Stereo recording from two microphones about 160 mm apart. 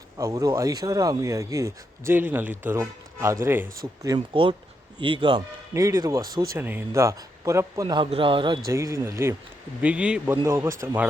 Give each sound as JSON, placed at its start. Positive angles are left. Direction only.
{"t": 0.2, "sound": "speech", "side_deg": -20}
{"t": 4.1, "sound": "a man's voice", "side_deg": -25}
{"t": 5.7, "sound": "speech", "side_deg": -20}
{"t": 8.7, "sound": "speech", "side_deg": -20}
{"t": 9.8, "sound": "speech", "side_deg": -5}
{"t": 10.3, "sound": "speech", "side_deg": -20}